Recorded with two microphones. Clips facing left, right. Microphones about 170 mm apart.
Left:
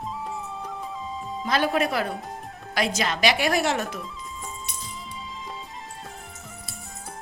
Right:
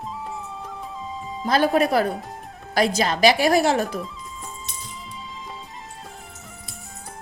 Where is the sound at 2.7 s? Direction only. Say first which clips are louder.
Right 5 dB; 40° right (ahead or behind).